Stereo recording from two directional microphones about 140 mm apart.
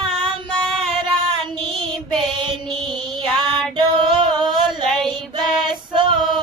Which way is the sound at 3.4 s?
35° right (ahead or behind).